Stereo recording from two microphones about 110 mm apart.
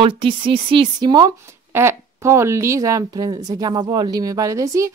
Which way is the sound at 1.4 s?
25° right (ahead or behind).